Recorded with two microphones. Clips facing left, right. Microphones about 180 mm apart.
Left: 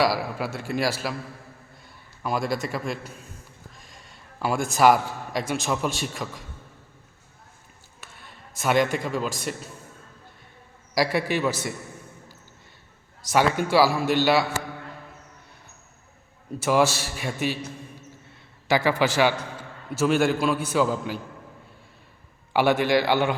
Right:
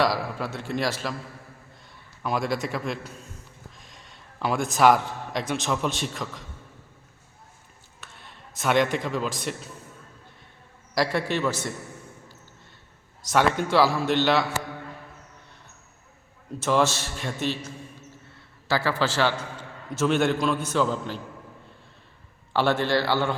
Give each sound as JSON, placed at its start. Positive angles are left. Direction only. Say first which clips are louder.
{"t": 0.0, "sound": "a man's voice", "louder": "left 1 dB", "side_deg": 5}
{"t": 2.2, "sound": "a man's voice", "louder": "even", "side_deg": 0}
{"t": 8.0, "sound": "a sound", "louder": "even", "side_deg": 10}
{"t": 8.6, "sound": "speech", "louder": "even", "side_deg": 5}
{"t": 10.9, "sound": "a man's voice", "louder": "left 1 dB", "side_deg": 10}
{"t": 13.3, "sound": "a man's voice", "louder": "left 1 dB", "side_deg": 10}
{"t": 16.6, "sound": "a man's voice", "louder": "left 2 dB", "side_deg": 10}
{"t": 18.7, "sound": "a man's voice", "louder": "left 3 dB", "side_deg": 15}
{"t": 22.5, "sound": "a man's voice", "louder": "left 2 dB", "side_deg": 15}